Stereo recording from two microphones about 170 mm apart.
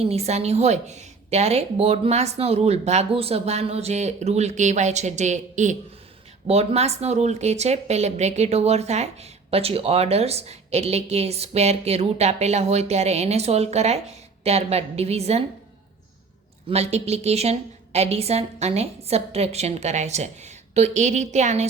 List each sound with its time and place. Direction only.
0.0 s speech: 40° right (ahead or behind)
16.6 s speech: 40° right (ahead or behind)